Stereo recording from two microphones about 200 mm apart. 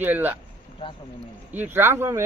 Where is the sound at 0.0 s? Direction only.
10° right (ahead or behind).